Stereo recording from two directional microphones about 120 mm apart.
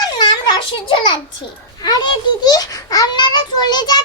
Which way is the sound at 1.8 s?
35° left (ahead or behind).